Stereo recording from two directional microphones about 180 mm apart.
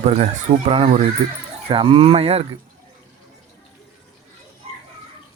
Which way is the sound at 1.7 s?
30° right (ahead or behind).